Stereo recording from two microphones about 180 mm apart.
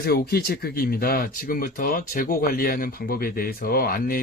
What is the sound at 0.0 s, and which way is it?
Speech, 60° left (ahead or behind).